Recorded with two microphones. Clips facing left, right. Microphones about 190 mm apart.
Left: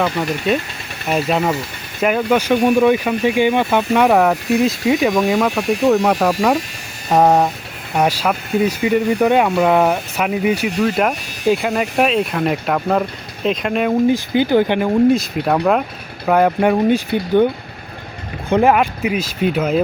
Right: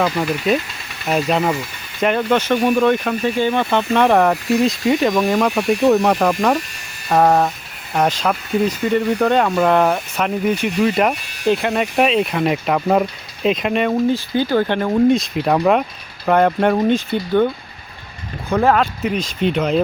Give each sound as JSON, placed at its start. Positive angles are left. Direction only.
{"t": 0.0, "sound": "speech", "side_deg": -5}
{"t": 14.1, "sound": "speech", "side_deg": 15}
{"t": 18.4, "sound": "speech", "side_deg": 25}
{"t": 18.7, "sound": "speech", "side_deg": 10}